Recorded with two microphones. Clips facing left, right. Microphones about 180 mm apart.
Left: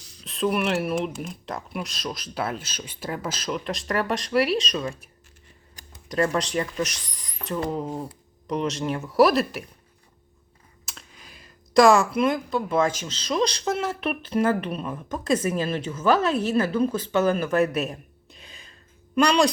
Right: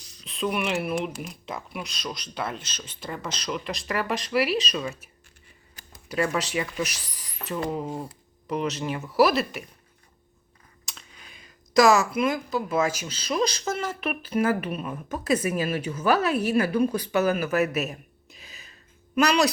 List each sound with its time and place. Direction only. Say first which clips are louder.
0.3 s speech: left 3 dB; centre (ahead or behind)
6.1 s speech: left 2 dB; 5° right (ahead or behind)
10.8 s speech: left 2 dB; centre (ahead or behind)